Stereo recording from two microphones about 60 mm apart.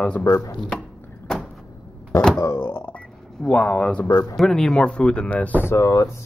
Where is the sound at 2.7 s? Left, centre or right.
Left.